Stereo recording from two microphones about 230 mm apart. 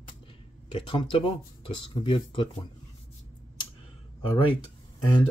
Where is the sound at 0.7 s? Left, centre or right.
Left.